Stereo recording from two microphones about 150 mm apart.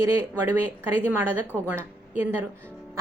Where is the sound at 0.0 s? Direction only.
15° right (ahead or behind).